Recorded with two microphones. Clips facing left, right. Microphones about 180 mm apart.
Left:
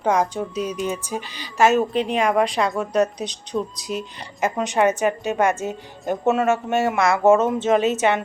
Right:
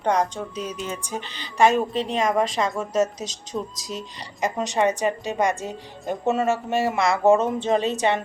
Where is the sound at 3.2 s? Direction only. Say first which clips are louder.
Left 4 dB; centre (ahead or behind).